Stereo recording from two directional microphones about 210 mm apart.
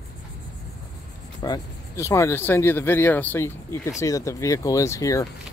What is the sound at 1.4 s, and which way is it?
Speech, 15° left (ahead or behind).